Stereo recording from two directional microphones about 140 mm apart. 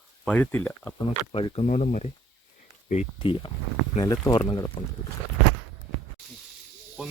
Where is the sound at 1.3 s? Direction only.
45° left (ahead or behind).